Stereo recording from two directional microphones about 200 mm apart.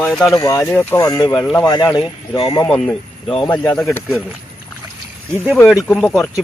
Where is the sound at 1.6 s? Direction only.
20° left (ahead or behind).